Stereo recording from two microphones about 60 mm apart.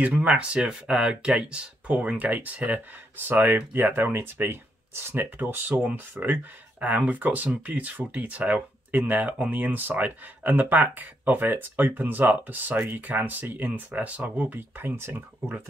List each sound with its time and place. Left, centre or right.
0.0 s speech: right